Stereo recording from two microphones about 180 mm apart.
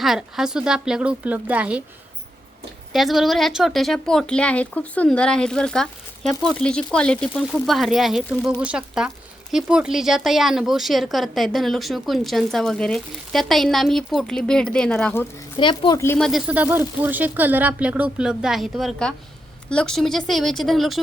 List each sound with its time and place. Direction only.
0.0 s speech: centre (ahead or behind)
2.9 s speech: centre (ahead or behind)
15.5 s speech: 30° left (ahead or behind)
16.0 s speech: 5° left (ahead or behind)
16.5 s speech: 10° right (ahead or behind)